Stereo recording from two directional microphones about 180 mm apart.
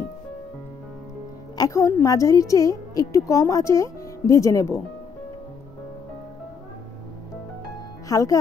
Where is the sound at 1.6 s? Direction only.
15° left (ahead or behind).